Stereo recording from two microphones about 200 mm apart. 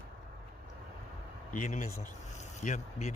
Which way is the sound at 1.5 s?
40° left (ahead or behind).